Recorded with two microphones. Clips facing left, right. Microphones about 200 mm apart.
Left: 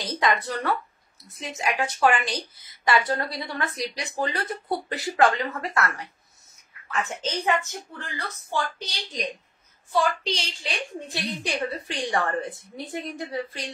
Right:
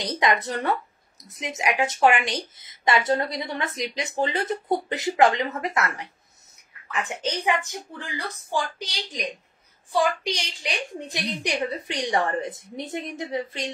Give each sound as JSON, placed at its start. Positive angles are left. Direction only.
{"t": 0.0, "sound": "a woman's voice", "side_deg": -20}